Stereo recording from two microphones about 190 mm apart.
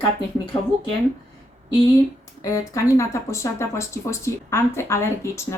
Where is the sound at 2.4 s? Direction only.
15° left (ahead or behind).